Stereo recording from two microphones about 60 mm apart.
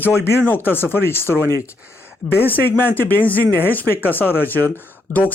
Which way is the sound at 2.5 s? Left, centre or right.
Left.